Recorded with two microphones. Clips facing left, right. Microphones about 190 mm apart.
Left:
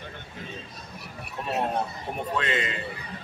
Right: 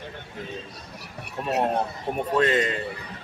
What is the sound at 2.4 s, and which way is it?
Speech, 40° right (ahead or behind).